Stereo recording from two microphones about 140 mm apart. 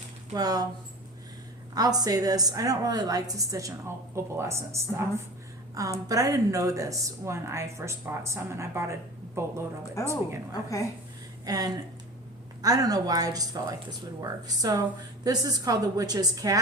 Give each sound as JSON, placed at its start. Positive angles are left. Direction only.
{"t": 0.3, "sound": "speech", "side_deg": -25}
{"t": 1.7, "sound": "speech", "side_deg": -25}
{"t": 9.8, "sound": "a woman's voice", "side_deg": 20}
{"t": 11.4, "sound": "speech", "side_deg": -25}